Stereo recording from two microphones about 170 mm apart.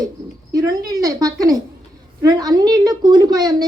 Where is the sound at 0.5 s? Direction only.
20° right (ahead or behind).